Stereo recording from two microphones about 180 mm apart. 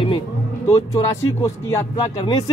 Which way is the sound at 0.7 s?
20° left (ahead or behind).